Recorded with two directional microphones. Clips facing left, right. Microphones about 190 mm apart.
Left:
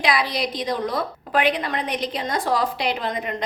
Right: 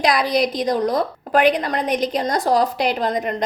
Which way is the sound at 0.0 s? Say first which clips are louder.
Right 5 dB; 45° right (ahead or behind).